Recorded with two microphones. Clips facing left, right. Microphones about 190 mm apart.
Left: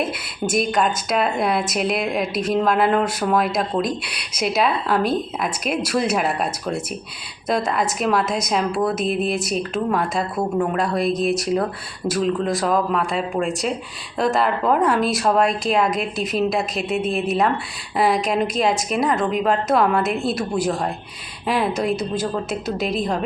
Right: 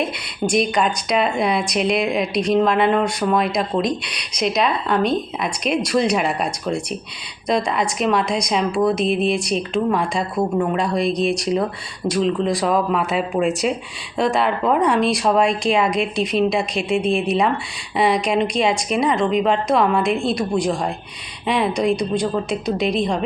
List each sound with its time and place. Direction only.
0.0 s speech: 5° left (ahead or behind)